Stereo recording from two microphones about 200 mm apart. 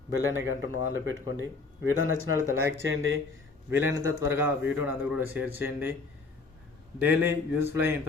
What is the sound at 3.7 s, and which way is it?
A man's voice, 10° right (ahead or behind).